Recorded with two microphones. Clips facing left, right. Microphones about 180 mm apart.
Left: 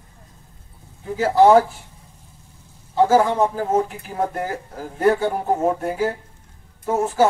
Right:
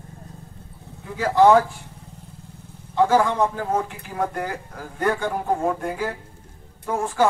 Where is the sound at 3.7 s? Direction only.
20° left (ahead or behind).